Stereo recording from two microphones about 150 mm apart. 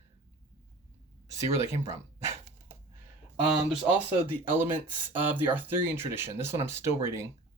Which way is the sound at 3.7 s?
5° right (ahead or behind).